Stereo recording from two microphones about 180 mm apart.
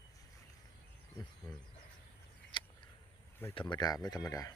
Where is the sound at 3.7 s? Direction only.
20° left (ahead or behind).